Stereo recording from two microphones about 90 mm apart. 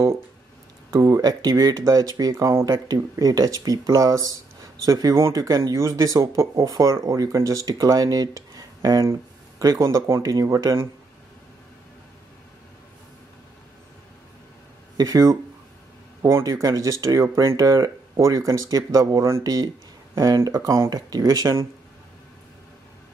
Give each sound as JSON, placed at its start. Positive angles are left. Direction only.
{"t": 0.9, "sound": "speech", "side_deg": -35}
{"t": 9.0, "sound": "a sound", "side_deg": -30}
{"t": 9.7, "sound": "speech", "side_deg": -40}
{"t": 15.0, "sound": "speech", "side_deg": -45}
{"t": 16.2, "sound": "speech", "side_deg": -30}